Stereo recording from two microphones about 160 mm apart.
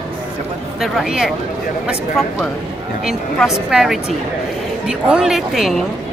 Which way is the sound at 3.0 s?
Centre (ahead or behind).